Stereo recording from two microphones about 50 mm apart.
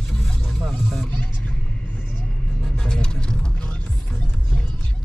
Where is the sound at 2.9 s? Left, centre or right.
Centre.